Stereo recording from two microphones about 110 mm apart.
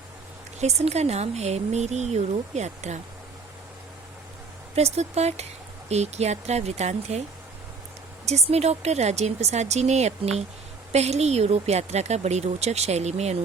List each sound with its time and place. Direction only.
0.6 s speech: 80° right
4.7 s a woman's voice: 70° right (ahead or behind); by 7.2 s 85° right
8.3 s a woman's voice: 75° right (ahead or behind)